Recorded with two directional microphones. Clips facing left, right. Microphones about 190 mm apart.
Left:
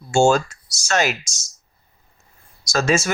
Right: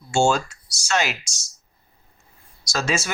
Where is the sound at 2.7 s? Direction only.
50° left (ahead or behind).